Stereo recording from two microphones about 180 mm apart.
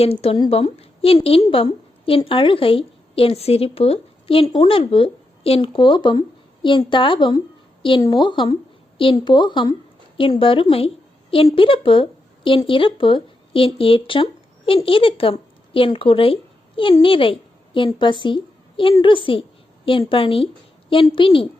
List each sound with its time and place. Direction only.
0.0 s a woman's voice: 35° left (ahead or behind)